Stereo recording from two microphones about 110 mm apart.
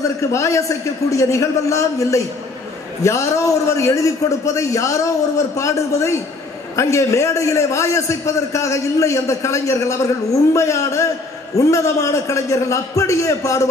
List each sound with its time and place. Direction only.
0.2 s a man's voice: 25° left (ahead or behind)